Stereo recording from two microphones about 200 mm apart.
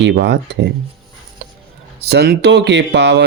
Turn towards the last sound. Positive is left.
turn(degrees=-60)  # may be behind; listen again after turning